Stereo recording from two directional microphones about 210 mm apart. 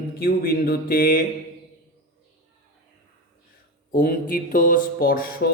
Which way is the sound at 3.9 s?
40° left (ahead or behind).